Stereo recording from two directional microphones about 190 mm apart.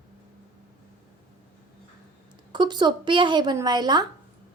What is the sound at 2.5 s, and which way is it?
Speech, 25° right (ahead or behind).